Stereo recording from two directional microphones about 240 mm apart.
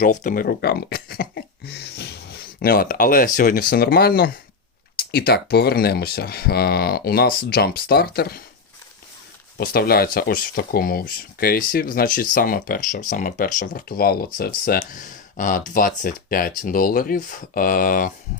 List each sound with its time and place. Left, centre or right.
0.0 s speech: left
9.6 s speech: left